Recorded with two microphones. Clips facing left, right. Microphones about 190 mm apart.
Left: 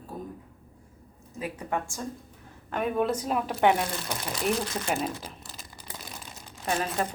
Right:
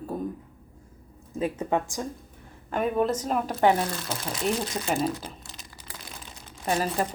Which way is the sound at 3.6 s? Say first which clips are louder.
Right 1 dB; 35° right (ahead or behind).